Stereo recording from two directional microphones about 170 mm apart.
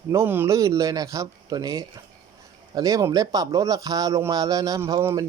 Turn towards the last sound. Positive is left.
turn(degrees=-20)  # may be behind; listen again after turning